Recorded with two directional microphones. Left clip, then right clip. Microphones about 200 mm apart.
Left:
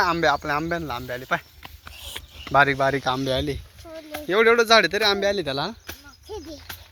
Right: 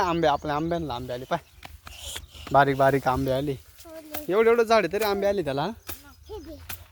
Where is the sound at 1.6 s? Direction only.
15° right (ahead or behind).